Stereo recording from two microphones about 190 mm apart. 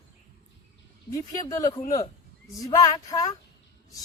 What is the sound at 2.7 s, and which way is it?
Child singing, 20° left (ahead or behind).